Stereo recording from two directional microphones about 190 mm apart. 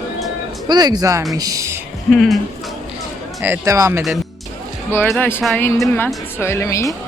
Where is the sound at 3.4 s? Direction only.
15° right (ahead or behind).